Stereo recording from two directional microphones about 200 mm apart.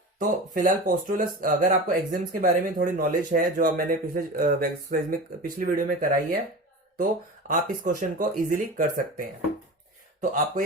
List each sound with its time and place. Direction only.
0.2 s speech: 40° right (ahead or behind)